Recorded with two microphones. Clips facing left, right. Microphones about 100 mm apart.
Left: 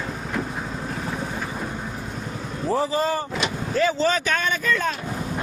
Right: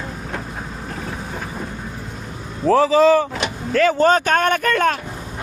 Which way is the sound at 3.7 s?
60° right (ahead or behind).